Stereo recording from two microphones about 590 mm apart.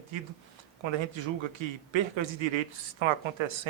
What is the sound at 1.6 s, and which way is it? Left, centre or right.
Speech, right.